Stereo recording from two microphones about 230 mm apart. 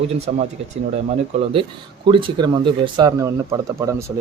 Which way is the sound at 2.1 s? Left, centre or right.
Right.